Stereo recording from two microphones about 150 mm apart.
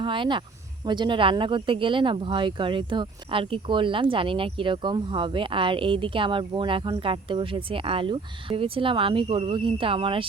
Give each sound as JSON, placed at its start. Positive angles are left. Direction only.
{"t": 0.0, "sound": "speech", "side_deg": -35}